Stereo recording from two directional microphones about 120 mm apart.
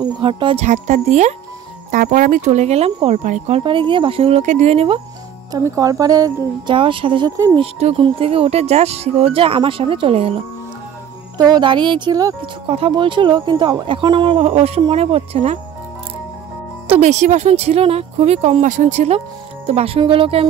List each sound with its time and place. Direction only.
0.0 s music: 45° right (ahead or behind)
0.7 s speech: 75° right (ahead or behind)
2.1 s speech: 90° right; by 3.6 s 60° right (ahead or behind)
3.6 s speech: 45° right (ahead or behind); by 4.8 s 65° right (ahead or behind)
5.5 s speech: 25° right (ahead or behind)
6.7 s speech: 45° right (ahead or behind)
7.2 s speech: 25° right (ahead or behind)
7.5 s speech: 50° right (ahead or behind)
11.3 s speech: 40° right (ahead or behind)
12.6 s speech: 50° right (ahead or behind)
17.0 s speech: 75° right (ahead or behind); by 20.4 s 50° right (ahead or behind)